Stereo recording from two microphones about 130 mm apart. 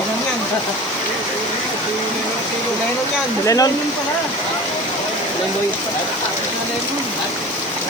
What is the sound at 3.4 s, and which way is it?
Speech, 25° left (ahead or behind).